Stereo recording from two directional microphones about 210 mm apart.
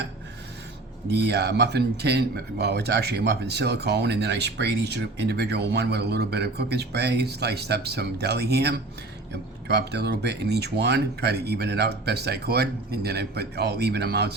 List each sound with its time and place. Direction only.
1.3 s speech: 50° right (ahead or behind)